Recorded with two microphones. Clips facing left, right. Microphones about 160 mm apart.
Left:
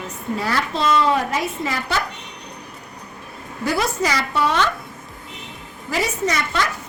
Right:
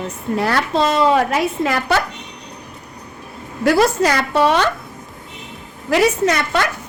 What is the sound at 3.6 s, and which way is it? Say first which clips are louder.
Speech: right 7 dB; 70° right (ahead or behind).